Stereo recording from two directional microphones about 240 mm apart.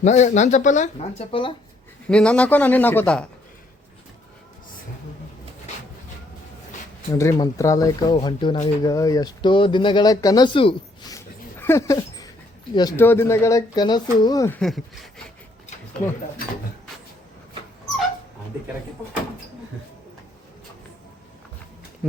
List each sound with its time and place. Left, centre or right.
0.0 s speech: left
2.0 s a man's voice: centre
7.1 s speech: centre